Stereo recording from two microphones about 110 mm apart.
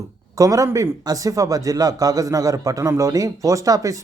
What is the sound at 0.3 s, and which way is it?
Speech, 30° right (ahead or behind).